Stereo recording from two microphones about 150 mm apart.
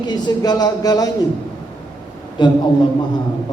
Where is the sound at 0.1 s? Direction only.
30° left (ahead or behind).